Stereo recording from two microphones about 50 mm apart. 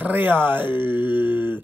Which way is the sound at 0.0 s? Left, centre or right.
Right.